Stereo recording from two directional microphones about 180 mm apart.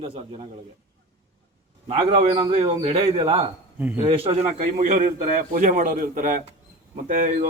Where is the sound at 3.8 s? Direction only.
10° right (ahead or behind).